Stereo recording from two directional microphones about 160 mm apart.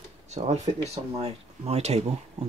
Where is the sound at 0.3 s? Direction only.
45° right (ahead or behind).